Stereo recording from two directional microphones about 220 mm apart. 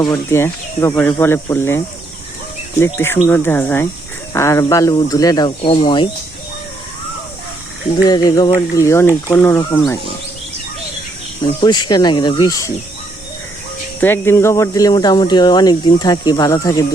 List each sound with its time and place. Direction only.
0.0 s speech: 15° left (ahead or behind)
8.0 s speech: 20° left (ahead or behind)
11.4 s speech: 20° left (ahead or behind)
14.0 s speech: 10° left (ahead or behind)